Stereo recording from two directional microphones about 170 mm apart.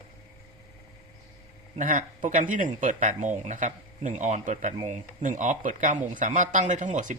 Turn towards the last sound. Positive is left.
turn(degrees=-45)  # may be behind; listen again after turning